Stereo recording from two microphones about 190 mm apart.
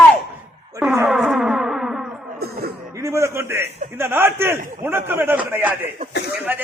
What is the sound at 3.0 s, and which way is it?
A man's voice, 15° right (ahead or behind).